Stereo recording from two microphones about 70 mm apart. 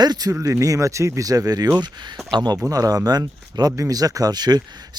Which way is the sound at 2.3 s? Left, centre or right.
Right.